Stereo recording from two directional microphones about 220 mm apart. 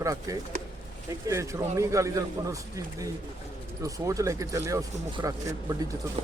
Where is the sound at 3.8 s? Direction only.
15° right (ahead or behind).